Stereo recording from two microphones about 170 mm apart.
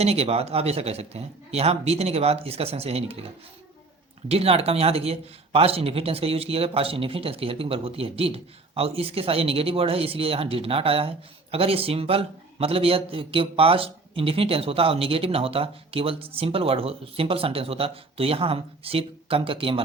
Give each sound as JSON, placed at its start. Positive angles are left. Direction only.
{"t": 0.0, "sound": "a man's voice", "side_deg": -35}
{"t": 4.3, "sound": "a man's voice", "side_deg": -35}